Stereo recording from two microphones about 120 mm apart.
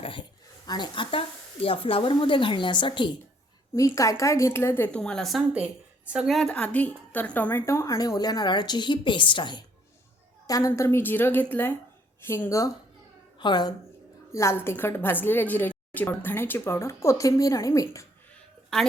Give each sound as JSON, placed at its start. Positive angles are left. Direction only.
{"t": 0.0, "sound": "a woman's voice", "side_deg": 45}
{"t": 3.8, "sound": "a woman's voice", "side_deg": 25}
{"t": 10.4, "sound": "a woman's voice", "side_deg": 30}
{"t": 13.4, "sound": "a woman's voice", "side_deg": 40}
{"t": 14.3, "sound": "a woman's voice", "side_deg": 20}